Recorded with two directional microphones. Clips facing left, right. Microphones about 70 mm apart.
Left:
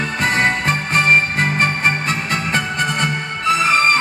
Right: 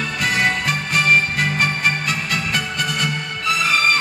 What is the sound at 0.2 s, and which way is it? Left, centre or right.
Music, left.